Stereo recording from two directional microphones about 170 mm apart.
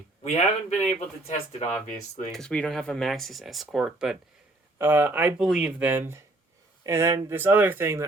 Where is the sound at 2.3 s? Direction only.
5° left (ahead or behind); by 8.0 s 15° right (ahead or behind).